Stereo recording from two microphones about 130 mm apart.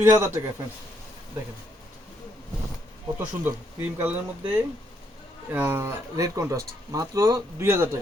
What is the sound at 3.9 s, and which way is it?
Speech, 15° right (ahead or behind).